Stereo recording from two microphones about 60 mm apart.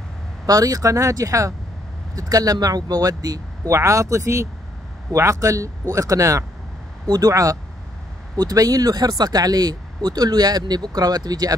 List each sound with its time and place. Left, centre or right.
0.5 s speech: right
2.1 s speech: right
3.7 s speech: right
7.1 s speech: right
8.4 s speech: right